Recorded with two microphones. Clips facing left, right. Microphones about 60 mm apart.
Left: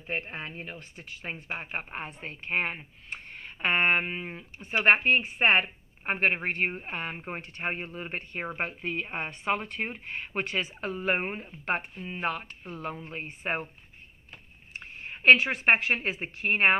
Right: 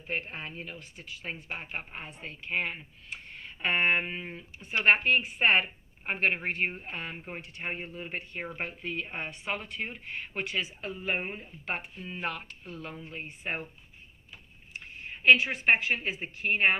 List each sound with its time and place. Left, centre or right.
0.1 s a woman's voice: left
4.0 s speech: left
5.0 s a woman's voice: left
7.4 s a woman's voice: left
12.0 s a woman's voice: left
14.7 s speech: left